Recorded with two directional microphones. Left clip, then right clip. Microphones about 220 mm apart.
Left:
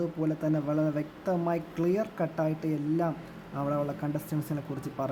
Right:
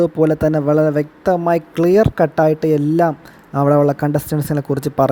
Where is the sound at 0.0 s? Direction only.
40° right (ahead or behind).